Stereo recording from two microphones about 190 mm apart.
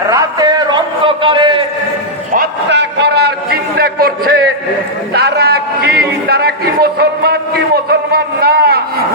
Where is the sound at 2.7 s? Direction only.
65° right (ahead or behind).